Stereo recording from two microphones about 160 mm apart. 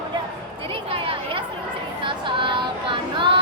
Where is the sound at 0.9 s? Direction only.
35° right (ahead or behind).